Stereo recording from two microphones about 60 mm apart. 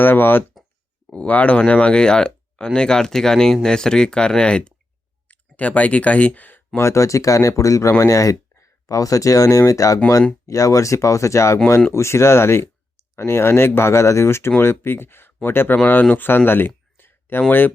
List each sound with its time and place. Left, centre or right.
0.0 s speech: left
1.1 s speech: left
6.7 s speech: left
16.5 s a sound: left